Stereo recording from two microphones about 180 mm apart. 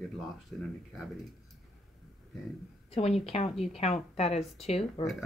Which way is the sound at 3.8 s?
40° left (ahead or behind).